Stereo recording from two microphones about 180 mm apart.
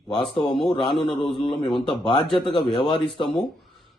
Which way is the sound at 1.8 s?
25° left (ahead or behind).